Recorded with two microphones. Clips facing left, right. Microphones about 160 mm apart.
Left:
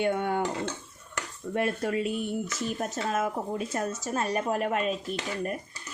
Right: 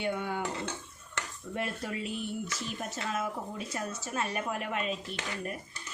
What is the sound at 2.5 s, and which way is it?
A woman's voice, 45° left (ahead or behind).